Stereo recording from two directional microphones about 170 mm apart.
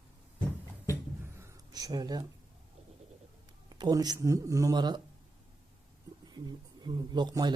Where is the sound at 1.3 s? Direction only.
20° right (ahead or behind).